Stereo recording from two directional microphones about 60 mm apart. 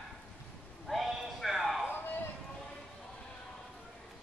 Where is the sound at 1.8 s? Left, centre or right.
Left.